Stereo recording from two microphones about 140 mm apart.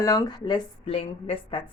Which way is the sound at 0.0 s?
25° left (ahead or behind).